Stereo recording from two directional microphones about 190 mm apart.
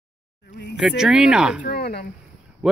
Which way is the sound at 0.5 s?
60° left (ahead or behind).